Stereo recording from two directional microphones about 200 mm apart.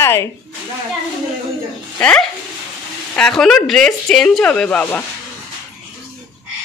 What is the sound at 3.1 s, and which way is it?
Speech, 5° left (ahead or behind).